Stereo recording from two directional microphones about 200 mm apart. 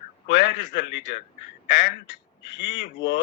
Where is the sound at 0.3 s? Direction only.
60° left (ahead or behind).